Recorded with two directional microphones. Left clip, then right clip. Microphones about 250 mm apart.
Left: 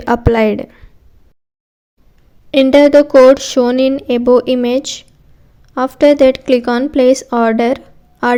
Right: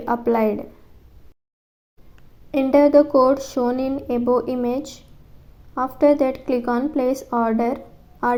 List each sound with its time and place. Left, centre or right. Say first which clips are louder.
0.0 s speech: left 7 dB; left
2.5 s speech: left 8 dB; left